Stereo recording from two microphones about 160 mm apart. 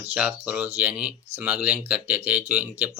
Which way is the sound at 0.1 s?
10° right (ahead or behind).